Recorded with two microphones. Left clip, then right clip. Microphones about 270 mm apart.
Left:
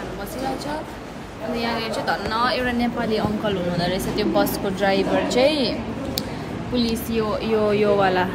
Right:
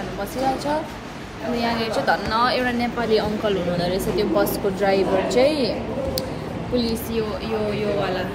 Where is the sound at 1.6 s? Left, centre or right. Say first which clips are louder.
Right 3 dB; centre.